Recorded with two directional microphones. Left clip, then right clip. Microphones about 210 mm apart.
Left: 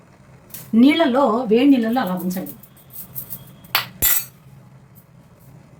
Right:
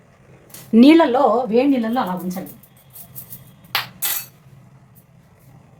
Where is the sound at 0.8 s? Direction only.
45° right (ahead or behind).